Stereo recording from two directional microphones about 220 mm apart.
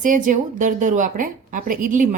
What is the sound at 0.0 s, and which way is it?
A woman's voice, 35° right (ahead or behind).